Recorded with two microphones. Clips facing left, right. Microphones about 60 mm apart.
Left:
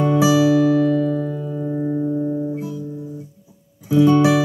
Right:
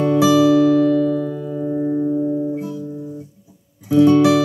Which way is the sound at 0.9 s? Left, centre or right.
Left.